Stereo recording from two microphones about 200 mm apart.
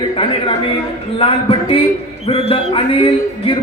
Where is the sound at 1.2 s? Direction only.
25° left (ahead or behind).